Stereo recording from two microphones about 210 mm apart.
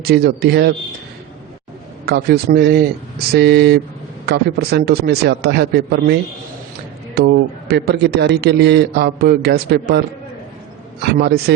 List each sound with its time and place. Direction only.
0.0 s a man's voice: 45° right (ahead or behind)
2.0 s a man's voice: 50° right (ahead or behind)
7.2 s a man's voice: 50° right (ahead or behind)
11.0 s a man's voice: 50° right (ahead or behind)